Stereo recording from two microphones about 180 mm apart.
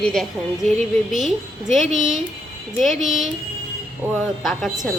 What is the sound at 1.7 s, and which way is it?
Speech, centre (ahead or behind).